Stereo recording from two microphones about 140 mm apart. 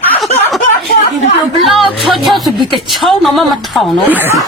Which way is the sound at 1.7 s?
Centre (ahead or behind).